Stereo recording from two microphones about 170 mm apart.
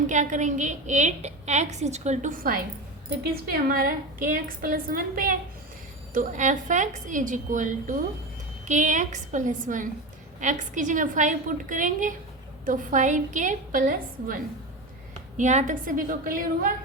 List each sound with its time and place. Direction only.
0.1 s a woman's voice: 45° right (ahead or behind)
15.4 s a woman's voice: 45° right (ahead or behind)